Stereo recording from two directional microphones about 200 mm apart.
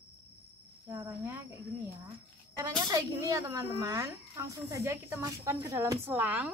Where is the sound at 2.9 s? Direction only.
20° right (ahead or behind).